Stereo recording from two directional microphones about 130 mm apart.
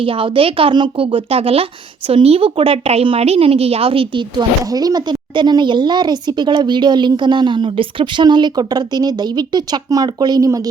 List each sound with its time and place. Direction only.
0.0 s a woman's voice: 45° right (ahead or behind)